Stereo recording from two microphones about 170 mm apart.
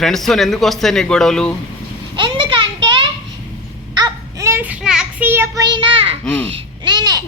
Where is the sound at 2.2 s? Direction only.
30° right (ahead or behind).